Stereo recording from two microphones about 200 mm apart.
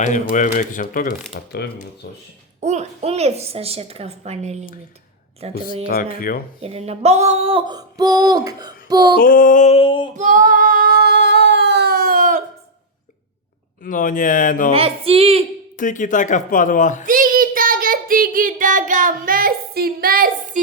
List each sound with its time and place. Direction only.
0.0 s speech: 40° left (ahead or behind)
2.6 s a woman's voice: 35° right (ahead or behind)
6.1 s speech: 45° left (ahead or behind)
6.6 s a sound: 30° right (ahead or behind)
9.1 s speech: 45° left (ahead or behind); by 10.1 s 25° left (ahead or behind)
10.2 s female singing: 40° right (ahead or behind)
13.8 s speech: 40° left (ahead or behind)
14.7 s a sound: 30° right (ahead or behind)
15.8 s speech: 40° left (ahead or behind)
17.1 s child singing: 45° right (ahead or behind)